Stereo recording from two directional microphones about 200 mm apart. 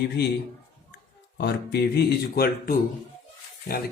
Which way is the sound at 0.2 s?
60° left (ahead or behind).